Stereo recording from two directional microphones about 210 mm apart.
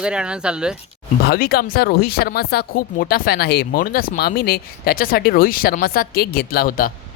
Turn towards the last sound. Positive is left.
turn(degrees=40)  # may be behind; listen again after turning